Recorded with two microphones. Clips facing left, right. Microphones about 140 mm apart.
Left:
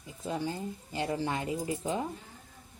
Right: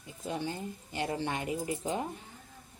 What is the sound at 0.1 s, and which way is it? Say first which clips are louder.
Speech: left 2 dB; 35° left (ahead or behind).